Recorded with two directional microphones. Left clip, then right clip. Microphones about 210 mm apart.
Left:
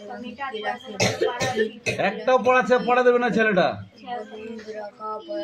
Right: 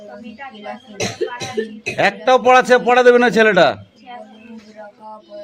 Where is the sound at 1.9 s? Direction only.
55° right (ahead or behind).